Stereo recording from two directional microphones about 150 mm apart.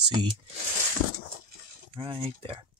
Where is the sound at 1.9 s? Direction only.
35° right (ahead or behind).